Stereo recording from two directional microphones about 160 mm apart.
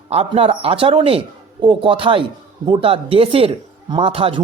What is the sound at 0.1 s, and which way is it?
Speech, 35° right (ahead or behind).